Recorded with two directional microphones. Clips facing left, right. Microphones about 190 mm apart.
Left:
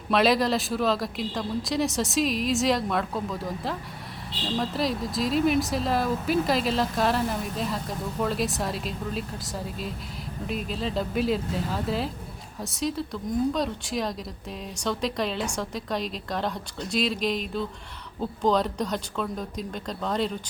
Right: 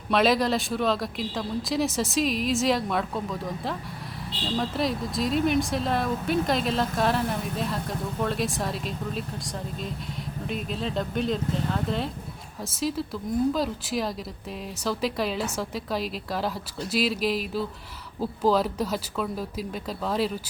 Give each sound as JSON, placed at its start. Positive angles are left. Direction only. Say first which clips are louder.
{"t": 0.1, "sound": "speech", "louder": "even", "side_deg": 0}
{"t": 10.4, "sound": "speech", "louder": "left 1 dB", "side_deg": 0}